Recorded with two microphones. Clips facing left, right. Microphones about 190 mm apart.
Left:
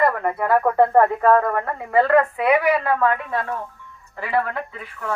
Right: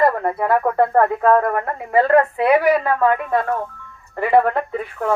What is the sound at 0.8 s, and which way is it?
Speech, 10° left (ahead or behind).